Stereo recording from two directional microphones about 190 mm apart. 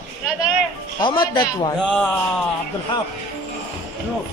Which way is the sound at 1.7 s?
5° left (ahead or behind).